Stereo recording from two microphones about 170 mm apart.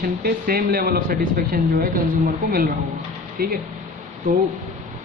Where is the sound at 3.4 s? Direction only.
65° right (ahead or behind).